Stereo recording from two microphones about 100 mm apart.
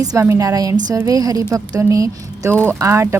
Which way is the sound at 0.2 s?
30° right (ahead or behind).